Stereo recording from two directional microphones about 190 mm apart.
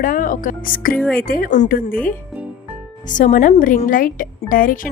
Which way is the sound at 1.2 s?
50° left (ahead or behind).